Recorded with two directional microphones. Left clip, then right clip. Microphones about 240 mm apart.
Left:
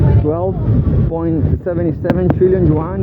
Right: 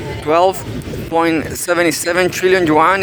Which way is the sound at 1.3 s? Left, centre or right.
Right.